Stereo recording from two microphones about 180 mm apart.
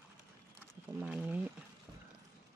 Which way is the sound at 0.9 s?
5° right (ahead or behind).